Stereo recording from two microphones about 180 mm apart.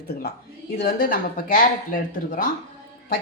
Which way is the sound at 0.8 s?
55° left (ahead or behind).